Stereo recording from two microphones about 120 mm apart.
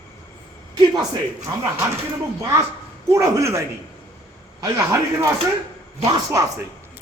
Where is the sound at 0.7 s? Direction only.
40° right (ahead or behind).